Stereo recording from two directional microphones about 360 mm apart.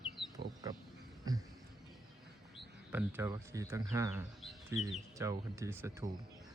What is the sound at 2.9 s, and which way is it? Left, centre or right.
Speech, centre.